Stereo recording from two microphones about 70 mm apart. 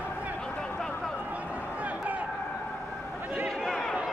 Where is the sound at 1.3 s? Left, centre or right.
Right.